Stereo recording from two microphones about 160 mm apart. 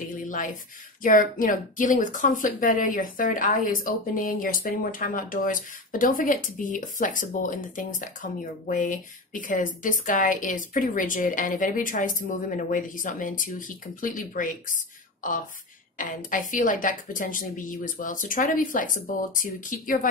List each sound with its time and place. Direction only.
0.2 s a sound: 55° left (ahead or behind)
1.0 s a woman's voice: 60° left (ahead or behind)
16.0 s a woman's voice: 55° left (ahead or behind)